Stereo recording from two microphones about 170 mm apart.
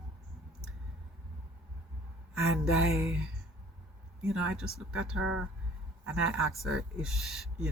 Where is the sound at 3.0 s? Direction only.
5° right (ahead or behind).